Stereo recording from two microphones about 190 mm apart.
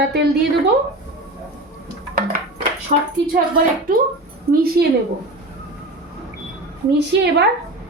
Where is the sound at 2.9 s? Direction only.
45° right (ahead or behind).